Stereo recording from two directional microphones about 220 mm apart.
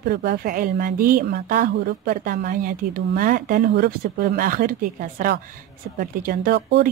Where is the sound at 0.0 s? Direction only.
45° right (ahead or behind).